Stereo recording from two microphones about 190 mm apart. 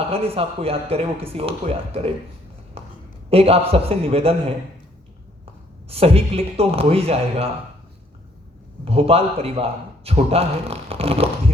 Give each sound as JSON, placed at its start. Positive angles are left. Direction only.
{"t": 0.1, "sound": "speech", "side_deg": -30}
{"t": 2.8, "sound": "a sound", "side_deg": -30}
{"t": 3.2, "sound": "a man's voice", "side_deg": -30}
{"t": 5.9, "sound": "speech", "side_deg": -30}
{"t": 8.8, "sound": "a man's voice", "side_deg": -30}